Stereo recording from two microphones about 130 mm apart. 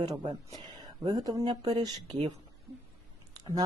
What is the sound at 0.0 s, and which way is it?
Speech, 30° right (ahead or behind).